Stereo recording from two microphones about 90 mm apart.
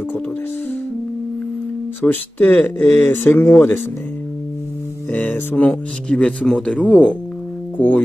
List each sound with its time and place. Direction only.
2.0 s speech: 20° left (ahead or behind)
5.1 s speech: 15° left (ahead or behind)
7.7 s music: 15° left (ahead or behind)